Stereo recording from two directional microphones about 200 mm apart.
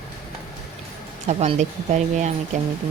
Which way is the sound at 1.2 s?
35° right (ahead or behind).